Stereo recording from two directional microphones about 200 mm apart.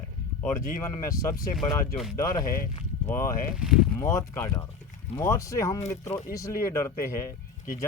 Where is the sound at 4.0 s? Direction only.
15° left (ahead or behind).